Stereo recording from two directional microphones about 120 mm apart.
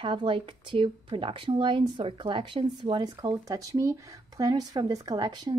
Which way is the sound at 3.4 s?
25° right (ahead or behind).